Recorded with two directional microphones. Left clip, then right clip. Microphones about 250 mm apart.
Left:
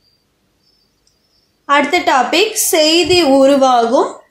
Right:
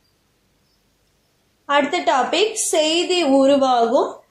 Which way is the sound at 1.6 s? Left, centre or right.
Left.